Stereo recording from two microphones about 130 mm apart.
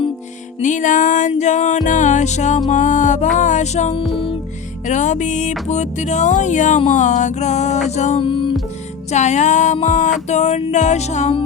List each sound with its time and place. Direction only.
0.6 s music: 75° left (ahead or behind)
1.3 s music: 65° left (ahead or behind)
8.2 s music: 40° left (ahead or behind)
9.1 s music: 65° left (ahead or behind)